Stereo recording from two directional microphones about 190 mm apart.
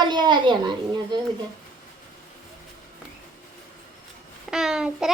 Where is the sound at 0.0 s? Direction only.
25° right (ahead or behind).